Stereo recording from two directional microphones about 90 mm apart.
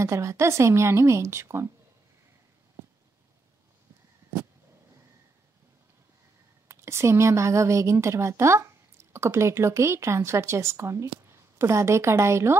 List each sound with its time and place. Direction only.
0.0 s a woman's voice: 35° right (ahead or behind)
6.7 s a woman's voice: 30° right (ahead or behind)